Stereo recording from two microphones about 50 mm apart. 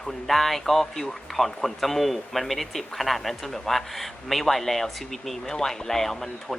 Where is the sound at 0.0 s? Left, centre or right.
Centre.